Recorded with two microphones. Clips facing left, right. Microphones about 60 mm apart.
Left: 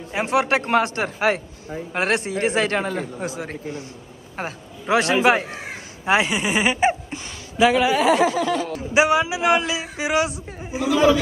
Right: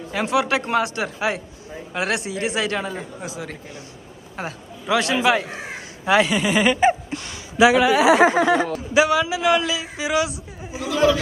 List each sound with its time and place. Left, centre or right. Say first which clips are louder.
0.1 s a man's voice: left 1 dB; left
3.2 s a man's voice: left 3 dB; left
6.3 s speech: right 2 dB; centre
7.1 s gasp: right 3 dB; centre
7.5 s speech: right 2 dB; centre
8.3 s speech: right 4 dB; right
8.9 s a man's voice: even; left